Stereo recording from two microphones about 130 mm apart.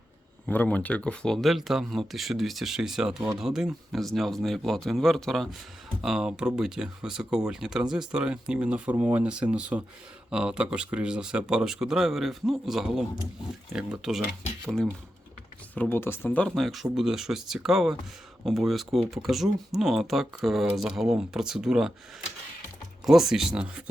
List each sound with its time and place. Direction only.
0.4 s speech: 10° left (ahead or behind); by 14.3 s 5° right (ahead or behind)
15.7 s speech: 15° left (ahead or behind)
16.6 s speech: centre (ahead or behind)
23.0 s speech: 5° right (ahead or behind)